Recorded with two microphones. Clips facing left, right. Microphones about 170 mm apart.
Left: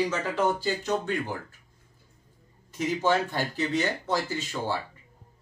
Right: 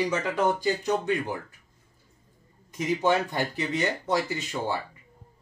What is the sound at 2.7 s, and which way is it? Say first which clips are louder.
Speech: right 1 dB; 15° right (ahead or behind).